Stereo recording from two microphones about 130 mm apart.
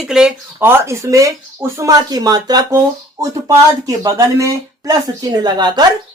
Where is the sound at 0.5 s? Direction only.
15° right (ahead or behind).